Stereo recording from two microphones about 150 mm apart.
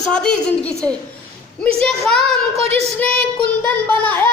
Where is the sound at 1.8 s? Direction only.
5° left (ahead or behind).